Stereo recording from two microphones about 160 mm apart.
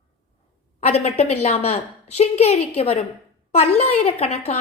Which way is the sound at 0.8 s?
40° left (ahead or behind).